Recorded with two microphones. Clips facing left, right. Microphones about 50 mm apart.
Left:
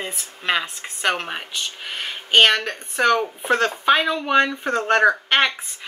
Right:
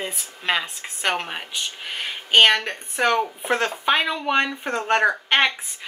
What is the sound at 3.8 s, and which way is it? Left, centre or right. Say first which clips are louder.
Speech: left 2 dB; centre.